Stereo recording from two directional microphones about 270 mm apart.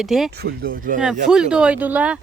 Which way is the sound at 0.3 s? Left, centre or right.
Right.